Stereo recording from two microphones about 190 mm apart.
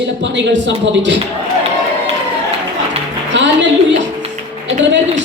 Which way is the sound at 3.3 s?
70° right (ahead or behind).